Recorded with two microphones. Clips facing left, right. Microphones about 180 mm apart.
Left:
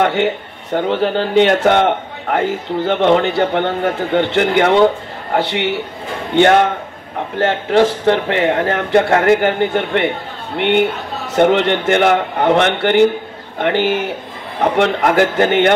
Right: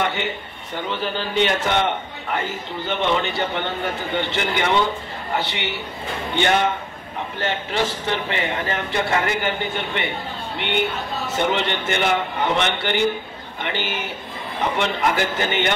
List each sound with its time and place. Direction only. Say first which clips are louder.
0.0 s a man's voice: left 9 dB; 70° left (ahead or behind)